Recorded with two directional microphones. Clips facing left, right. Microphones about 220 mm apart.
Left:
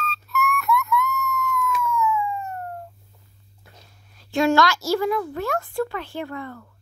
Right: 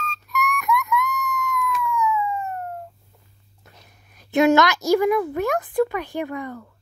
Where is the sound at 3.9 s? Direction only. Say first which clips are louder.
Right 4 dB; 20° right (ahead or behind).